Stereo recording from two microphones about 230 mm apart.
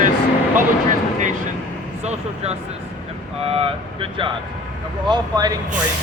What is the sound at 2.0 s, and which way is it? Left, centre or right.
Speech, right.